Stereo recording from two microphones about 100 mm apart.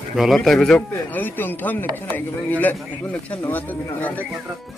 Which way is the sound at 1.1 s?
20° left (ahead or behind).